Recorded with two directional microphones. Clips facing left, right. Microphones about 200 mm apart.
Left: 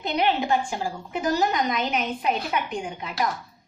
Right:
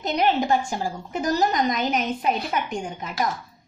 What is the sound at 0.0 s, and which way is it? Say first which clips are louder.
A woman's voice: right 2 dB; 40° right (ahead or behind).